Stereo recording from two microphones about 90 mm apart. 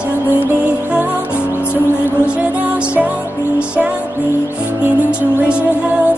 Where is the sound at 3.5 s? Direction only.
15° right (ahead or behind).